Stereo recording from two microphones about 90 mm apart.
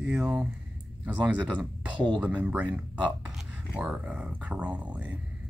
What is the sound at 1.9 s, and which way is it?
Speech, 60° right (ahead or behind).